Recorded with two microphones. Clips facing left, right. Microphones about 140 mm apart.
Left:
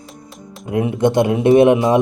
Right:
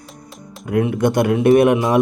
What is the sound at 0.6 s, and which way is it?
Speech, 25° left (ahead or behind).